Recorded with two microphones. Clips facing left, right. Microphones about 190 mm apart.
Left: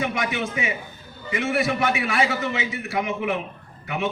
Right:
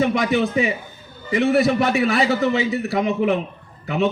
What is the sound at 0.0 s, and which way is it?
Speech, 35° right (ahead or behind).